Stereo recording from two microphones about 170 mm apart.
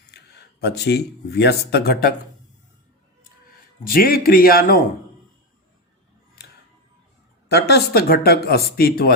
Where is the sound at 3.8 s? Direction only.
60° left (ahead or behind).